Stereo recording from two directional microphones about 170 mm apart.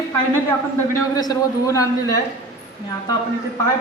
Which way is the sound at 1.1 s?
20° left (ahead or behind).